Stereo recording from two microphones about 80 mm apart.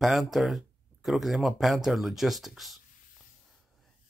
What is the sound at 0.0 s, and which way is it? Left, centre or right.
Speech, centre.